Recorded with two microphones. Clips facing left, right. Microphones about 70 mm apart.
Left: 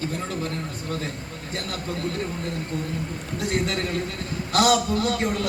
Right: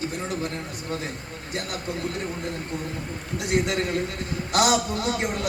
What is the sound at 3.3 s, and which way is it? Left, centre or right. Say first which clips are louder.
A man's voice: right 2 dB; centre.